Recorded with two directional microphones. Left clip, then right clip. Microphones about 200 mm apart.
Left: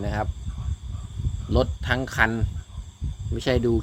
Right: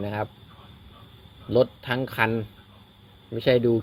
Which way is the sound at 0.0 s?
20° left (ahead or behind).